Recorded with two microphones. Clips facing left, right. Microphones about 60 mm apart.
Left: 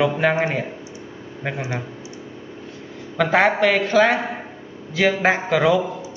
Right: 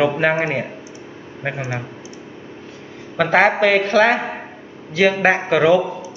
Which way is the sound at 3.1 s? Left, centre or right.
Centre.